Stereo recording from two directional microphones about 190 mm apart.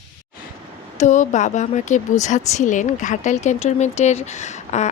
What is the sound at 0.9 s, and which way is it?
Speech, 40° left (ahead or behind).